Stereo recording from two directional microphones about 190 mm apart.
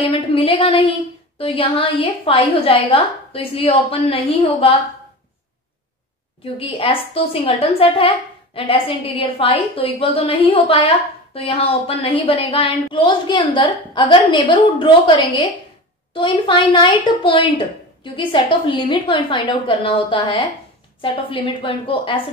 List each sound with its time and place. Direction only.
0.0 s a woman's voice: 30° left (ahead or behind)
6.4 s a woman's voice: 30° left (ahead or behind)